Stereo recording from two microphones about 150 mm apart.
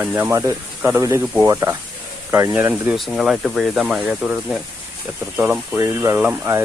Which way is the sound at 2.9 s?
Centre (ahead or behind).